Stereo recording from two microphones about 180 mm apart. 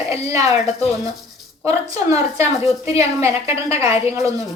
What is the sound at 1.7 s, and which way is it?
A woman's voice, 20° right (ahead or behind).